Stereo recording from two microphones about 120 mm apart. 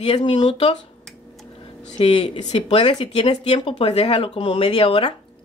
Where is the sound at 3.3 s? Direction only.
60° left (ahead or behind).